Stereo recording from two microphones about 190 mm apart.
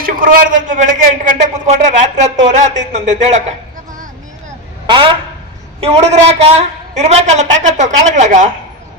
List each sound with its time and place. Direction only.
0.0 s a woman's voice: 45° right (ahead or behind)
4.9 s a man's voice: 25° right (ahead or behind)